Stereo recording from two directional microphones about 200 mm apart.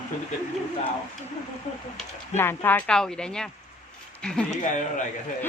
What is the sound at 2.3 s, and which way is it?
Speech, 10° left (ahead or behind).